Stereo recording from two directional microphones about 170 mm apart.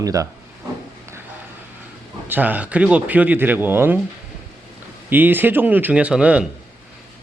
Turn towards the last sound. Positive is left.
turn(degrees=-5)  # may be behind; listen again after turning